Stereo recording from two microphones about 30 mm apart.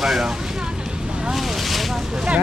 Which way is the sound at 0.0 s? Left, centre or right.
Centre.